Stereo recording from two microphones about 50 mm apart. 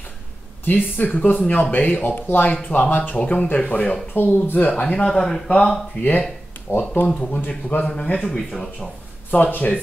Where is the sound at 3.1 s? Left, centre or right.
Left.